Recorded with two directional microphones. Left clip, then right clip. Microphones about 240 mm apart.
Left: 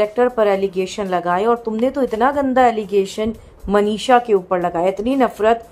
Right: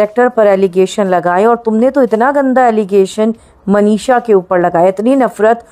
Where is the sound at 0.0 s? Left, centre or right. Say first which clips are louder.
Right 7 dB; right.